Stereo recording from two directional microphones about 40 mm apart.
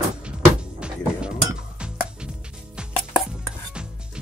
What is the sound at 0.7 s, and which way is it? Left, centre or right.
Music, right.